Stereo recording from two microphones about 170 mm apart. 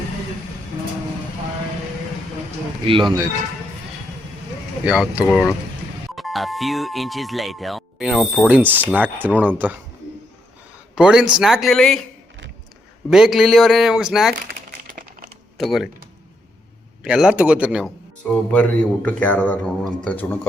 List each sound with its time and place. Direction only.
2.8 s speech: 30° right (ahead or behind)
4.9 s speech: 5° right (ahead or behind)
10.9 s speech: 5° right (ahead or behind)
13.1 s speech: 5° right (ahead or behind)
14.8 s typing: 55° right (ahead or behind)
15.5 s speech: centre (ahead or behind)
17.0 s speech: 5° right (ahead or behind)
18.5 s a man's voice: 5° left (ahead or behind)